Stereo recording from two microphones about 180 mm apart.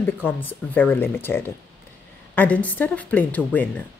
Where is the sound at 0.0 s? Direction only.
10° left (ahead or behind).